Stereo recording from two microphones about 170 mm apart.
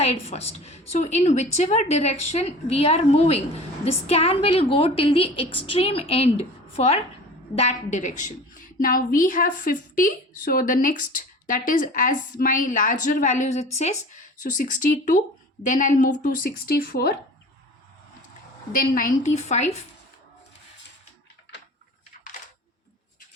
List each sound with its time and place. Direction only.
0.0 s a woman's voice: 35° left (ahead or behind); by 17.2 s 65° left (ahead or behind)
18.7 s a woman's voice: 55° left (ahead or behind)